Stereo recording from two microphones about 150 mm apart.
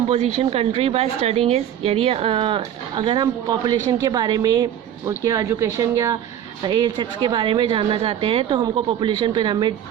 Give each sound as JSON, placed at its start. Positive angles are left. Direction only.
{"t": 0.1, "sound": "a woman's voice", "side_deg": -40}
{"t": 6.6, "sound": "a woman's voice", "side_deg": -30}